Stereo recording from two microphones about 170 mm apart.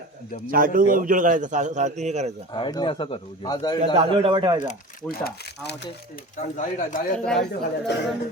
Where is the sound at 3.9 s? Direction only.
30° right (ahead or behind).